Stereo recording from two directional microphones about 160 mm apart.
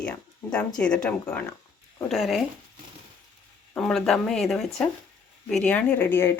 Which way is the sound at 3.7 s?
Centre (ahead or behind).